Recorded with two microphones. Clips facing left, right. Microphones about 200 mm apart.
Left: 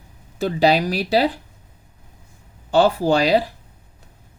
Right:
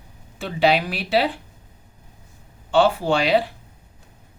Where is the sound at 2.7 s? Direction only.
40° left (ahead or behind).